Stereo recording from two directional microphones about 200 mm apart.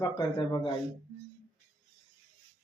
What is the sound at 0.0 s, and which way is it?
Speech, 20° left (ahead or behind).